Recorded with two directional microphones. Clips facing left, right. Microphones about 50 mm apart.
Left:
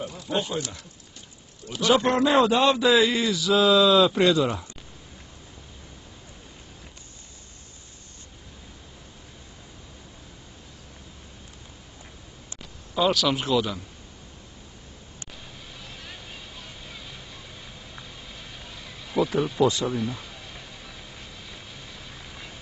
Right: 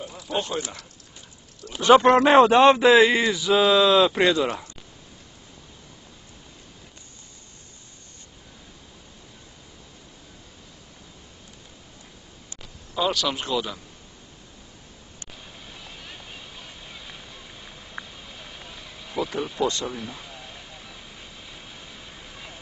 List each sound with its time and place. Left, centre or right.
0.1 s speech: centre
1.8 s a man's voice: right
12.5 s a sound: centre
15.2 s vehicle: centre